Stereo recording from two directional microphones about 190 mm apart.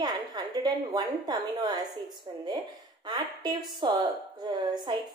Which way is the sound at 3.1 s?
25° right (ahead or behind).